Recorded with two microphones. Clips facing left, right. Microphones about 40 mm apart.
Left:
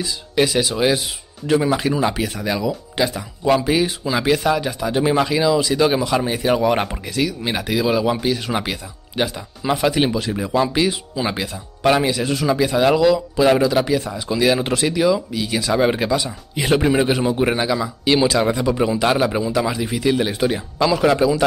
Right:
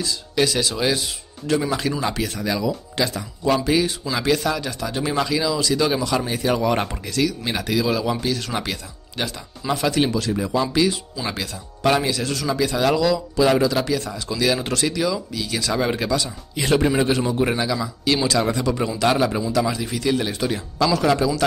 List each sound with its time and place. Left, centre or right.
0.0 s speech: centre